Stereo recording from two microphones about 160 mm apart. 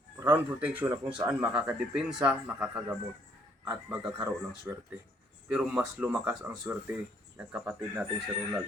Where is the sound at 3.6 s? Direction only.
30° right (ahead or behind).